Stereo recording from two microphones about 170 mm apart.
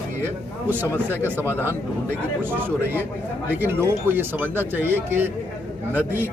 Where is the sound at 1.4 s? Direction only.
15° left (ahead or behind).